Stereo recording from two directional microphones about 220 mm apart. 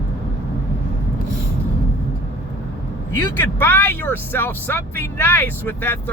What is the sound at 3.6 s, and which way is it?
Speech, 10° left (ahead or behind).